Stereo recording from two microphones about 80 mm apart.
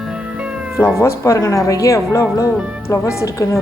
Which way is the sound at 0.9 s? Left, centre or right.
Left.